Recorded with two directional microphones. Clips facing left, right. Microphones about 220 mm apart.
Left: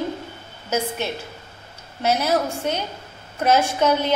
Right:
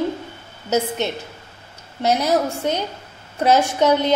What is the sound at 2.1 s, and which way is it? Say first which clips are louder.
A woman's voice: right 2 dB; 15° right (ahead or behind).